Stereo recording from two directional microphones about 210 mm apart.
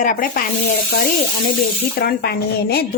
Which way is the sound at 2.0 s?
50° left (ahead or behind).